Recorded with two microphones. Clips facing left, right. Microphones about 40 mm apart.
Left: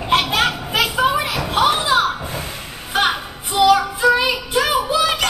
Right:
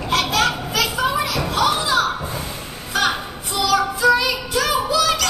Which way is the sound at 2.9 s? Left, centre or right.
Left.